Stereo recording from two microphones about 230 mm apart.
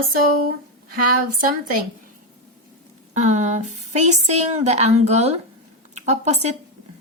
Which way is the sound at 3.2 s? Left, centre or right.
Right.